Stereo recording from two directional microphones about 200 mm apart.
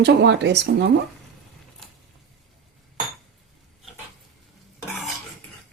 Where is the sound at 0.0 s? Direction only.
60° right (ahead or behind).